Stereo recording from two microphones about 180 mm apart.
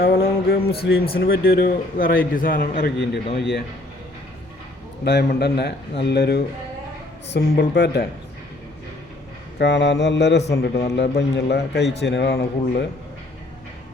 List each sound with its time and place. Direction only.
0.0 s music: 60° left (ahead or behind)
1.2 s a man's voice: 60° left (ahead or behind)
2.7 s a man's voice: 75° left (ahead or behind)
5.0 s a man's voice: 65° left (ahead or behind)
9.6 s a man's voice: 75° left (ahead or behind); by 12.8 s 60° left (ahead or behind)